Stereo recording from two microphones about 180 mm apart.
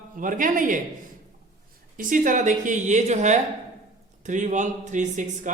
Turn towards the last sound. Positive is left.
turn(degrees=-45)  # may be behind; listen again after turning